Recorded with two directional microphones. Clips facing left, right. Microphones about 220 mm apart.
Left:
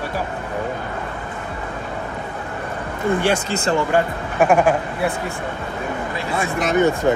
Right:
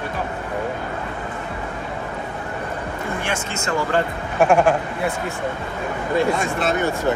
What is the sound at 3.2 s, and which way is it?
Speech, 35° left (ahead or behind).